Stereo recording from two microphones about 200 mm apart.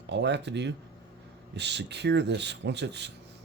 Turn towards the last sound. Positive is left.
turn(degrees=-60)  # may be behind; listen again after turning